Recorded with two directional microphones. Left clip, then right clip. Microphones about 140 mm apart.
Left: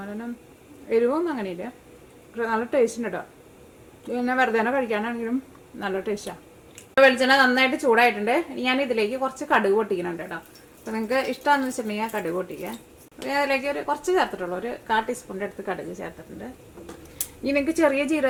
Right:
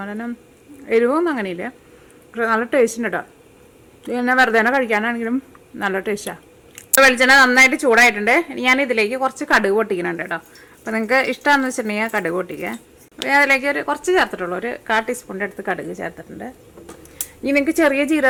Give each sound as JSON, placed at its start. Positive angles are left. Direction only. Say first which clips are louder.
{"t": 0.0, "sound": "a woman's voice", "louder": "right 6 dB", "side_deg": -35}